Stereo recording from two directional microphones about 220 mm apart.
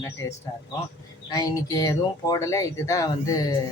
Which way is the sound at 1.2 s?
15° left (ahead or behind).